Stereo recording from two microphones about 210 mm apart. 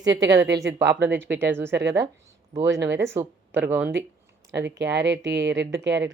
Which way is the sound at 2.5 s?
15° right (ahead or behind).